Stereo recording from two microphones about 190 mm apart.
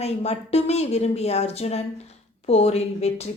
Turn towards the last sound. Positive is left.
turn(degrees=35)  # may be behind; listen again after turning